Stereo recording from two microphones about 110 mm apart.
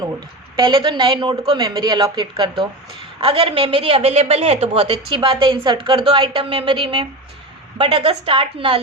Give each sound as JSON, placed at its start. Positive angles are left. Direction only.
{"t": 0.5, "sound": "a woman's voice", "side_deg": -45}
{"t": 3.2, "sound": "a woman's voice", "side_deg": -55}